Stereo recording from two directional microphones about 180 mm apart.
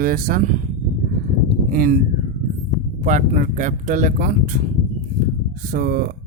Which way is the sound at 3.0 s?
40° right (ahead or behind).